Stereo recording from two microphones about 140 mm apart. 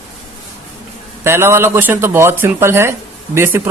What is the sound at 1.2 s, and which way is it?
Speech, 20° right (ahead or behind).